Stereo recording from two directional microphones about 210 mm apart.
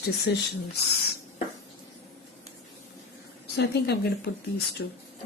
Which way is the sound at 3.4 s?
50° left (ahead or behind).